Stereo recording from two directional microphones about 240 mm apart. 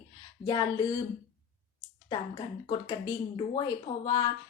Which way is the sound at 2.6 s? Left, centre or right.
Centre.